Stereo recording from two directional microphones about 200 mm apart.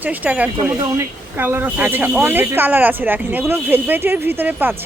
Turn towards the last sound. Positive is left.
turn(degrees=-10)  # may be behind; listen again after turning